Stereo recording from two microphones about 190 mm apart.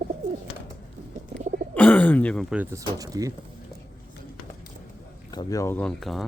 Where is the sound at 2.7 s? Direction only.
20° right (ahead or behind).